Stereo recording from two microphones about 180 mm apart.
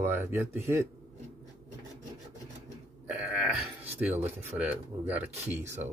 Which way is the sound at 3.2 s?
10° right (ahead or behind).